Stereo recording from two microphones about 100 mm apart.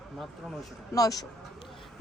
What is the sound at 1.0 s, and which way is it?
Speech, 35° left (ahead or behind).